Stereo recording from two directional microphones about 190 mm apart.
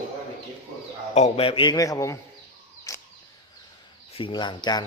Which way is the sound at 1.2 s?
30° left (ahead or behind).